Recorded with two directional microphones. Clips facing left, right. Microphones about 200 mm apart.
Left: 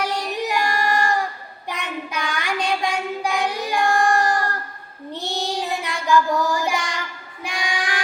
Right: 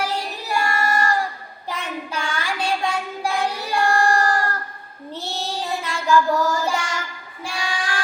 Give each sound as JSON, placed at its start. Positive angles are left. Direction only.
{"t": 0.0, "sound": "child singing", "side_deg": 15}